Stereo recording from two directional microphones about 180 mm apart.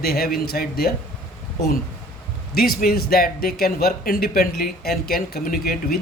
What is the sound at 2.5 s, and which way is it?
Speech, 55° left (ahead or behind).